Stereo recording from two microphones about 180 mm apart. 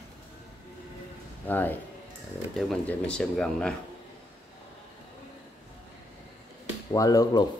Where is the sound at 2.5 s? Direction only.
Centre (ahead or behind).